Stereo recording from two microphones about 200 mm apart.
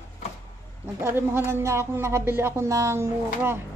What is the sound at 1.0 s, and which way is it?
Speech, 10° right (ahead or behind).